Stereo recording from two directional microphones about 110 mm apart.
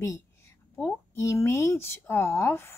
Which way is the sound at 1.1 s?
25° left (ahead or behind).